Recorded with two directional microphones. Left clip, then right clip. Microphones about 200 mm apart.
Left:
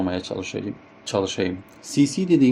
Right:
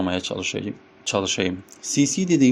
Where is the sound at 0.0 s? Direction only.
30° right (ahead or behind).